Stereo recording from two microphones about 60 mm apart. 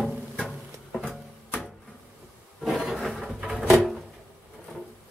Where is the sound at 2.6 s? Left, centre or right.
Centre.